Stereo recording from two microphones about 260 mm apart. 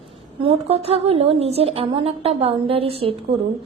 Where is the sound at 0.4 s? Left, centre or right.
Right.